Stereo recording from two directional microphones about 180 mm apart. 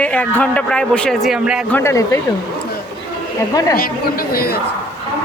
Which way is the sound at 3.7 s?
55° left (ahead or behind).